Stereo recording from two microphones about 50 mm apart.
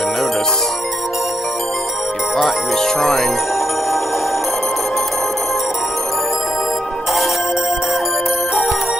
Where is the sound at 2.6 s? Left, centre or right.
Centre.